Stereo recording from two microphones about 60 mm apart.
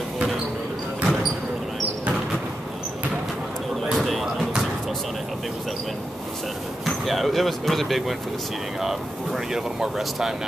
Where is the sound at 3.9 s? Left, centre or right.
Centre.